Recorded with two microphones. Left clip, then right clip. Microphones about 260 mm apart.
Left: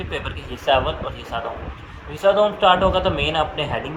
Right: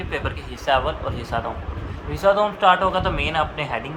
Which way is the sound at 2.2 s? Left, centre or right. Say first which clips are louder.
Left 2 dB; right.